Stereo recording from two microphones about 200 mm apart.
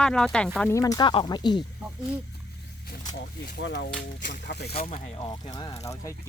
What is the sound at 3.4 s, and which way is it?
Speech, 60° left (ahead or behind).